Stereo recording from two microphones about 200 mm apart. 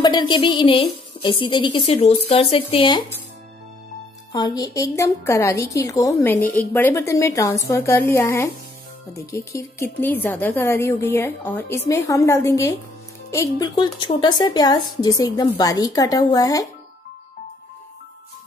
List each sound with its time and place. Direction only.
0.0 s a woman's voice: 20° left (ahead or behind)
4.3 s a woman's voice: 20° left (ahead or behind)